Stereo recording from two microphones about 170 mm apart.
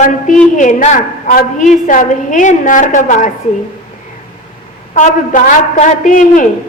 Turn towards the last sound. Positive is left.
turn(degrees=50)  # may be behind; listen again after turning